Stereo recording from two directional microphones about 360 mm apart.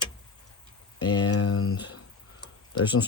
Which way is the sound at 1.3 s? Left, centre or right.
Left.